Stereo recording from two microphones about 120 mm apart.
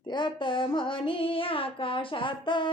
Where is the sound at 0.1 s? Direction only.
40° left (ahead or behind).